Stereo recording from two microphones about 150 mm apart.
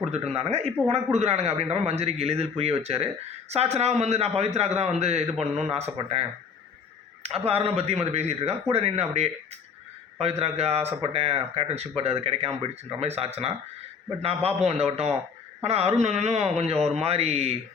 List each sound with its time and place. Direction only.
0.3 s speech: 40° right (ahead or behind)
7.3 s speech: 40° right (ahead or behind)